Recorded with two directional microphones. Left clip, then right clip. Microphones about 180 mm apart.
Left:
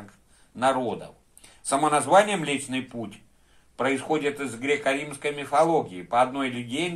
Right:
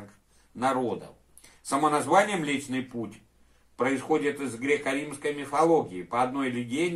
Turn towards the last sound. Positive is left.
turn(degrees=25)  # may be behind; listen again after turning